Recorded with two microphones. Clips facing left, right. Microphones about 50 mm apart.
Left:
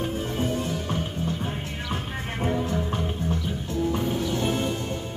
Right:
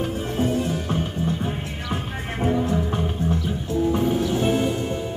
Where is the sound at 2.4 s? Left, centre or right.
Centre.